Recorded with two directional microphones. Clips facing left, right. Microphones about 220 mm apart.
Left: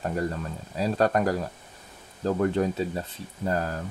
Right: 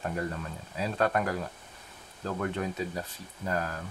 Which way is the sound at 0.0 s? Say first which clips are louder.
Left 5 dB; 35° left (ahead or behind).